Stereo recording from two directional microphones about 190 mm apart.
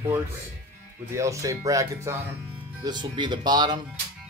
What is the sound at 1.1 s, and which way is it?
Speech, 15° right (ahead or behind).